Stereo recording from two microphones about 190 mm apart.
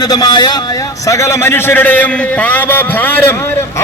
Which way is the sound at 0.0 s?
20° left (ahead or behind).